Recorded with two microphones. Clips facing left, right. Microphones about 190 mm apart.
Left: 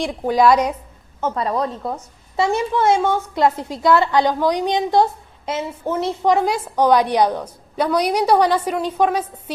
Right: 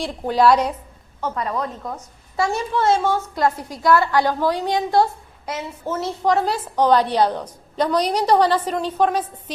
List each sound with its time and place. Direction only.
0.0 s a woman's voice: 10° left (ahead or behind)
1.4 s a woman's voice: 30° left (ahead or behind); by 9.3 s 10° left (ahead or behind)